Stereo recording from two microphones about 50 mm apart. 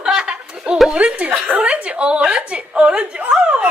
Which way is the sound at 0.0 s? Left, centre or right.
Centre.